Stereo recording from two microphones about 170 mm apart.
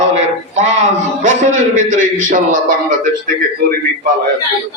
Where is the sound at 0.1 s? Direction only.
45° right (ahead or behind).